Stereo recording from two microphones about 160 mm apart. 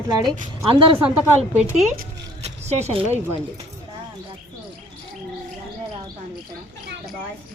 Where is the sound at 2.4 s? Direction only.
45° right (ahead or behind).